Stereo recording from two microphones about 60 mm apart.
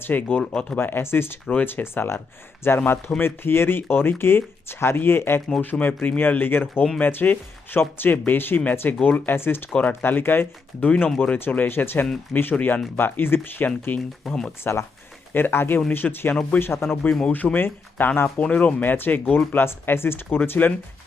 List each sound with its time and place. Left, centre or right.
0.0 s speech: left
0.8 s speech: left
5.5 s speech: left
14.3 s speech: centre
14.6 s speech: left
15.3 s speech: left
16.3 s speech: left
16.6 s speech: left